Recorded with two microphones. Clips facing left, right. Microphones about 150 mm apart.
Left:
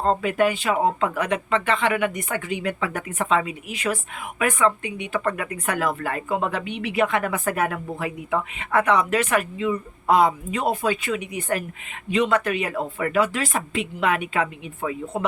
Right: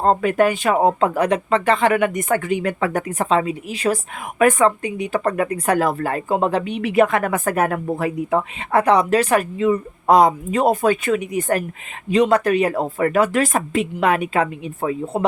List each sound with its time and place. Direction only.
0.0 s speech: 50° right (ahead or behind); by 15.2 s 35° right (ahead or behind)